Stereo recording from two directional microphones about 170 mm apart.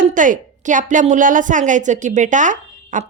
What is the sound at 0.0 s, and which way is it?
A woman's voice, 50° right (ahead or behind).